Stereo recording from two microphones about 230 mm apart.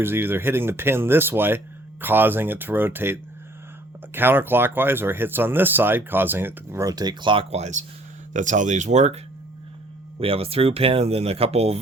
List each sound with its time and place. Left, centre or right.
0.0 s speech: centre; by 11.8 s right